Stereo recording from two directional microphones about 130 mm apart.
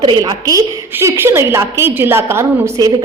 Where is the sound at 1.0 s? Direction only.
20° right (ahead or behind).